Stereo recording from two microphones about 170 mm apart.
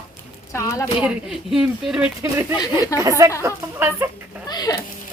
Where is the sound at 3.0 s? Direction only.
20° right (ahead or behind).